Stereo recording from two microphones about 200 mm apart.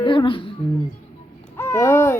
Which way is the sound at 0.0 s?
25° left (ahead or behind).